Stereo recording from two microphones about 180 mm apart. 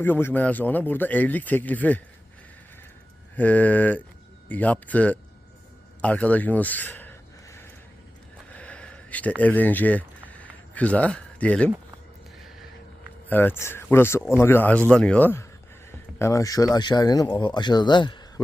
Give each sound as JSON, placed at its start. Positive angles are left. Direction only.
{"t": 0.0, "sound": "speech", "side_deg": 10}
{"t": 3.3, "sound": "speech", "side_deg": 10}
{"t": 8.5, "sound": "a sound", "side_deg": 5}
{"t": 9.4, "sound": "speech", "side_deg": 10}
{"t": 13.2, "sound": "speech", "side_deg": 10}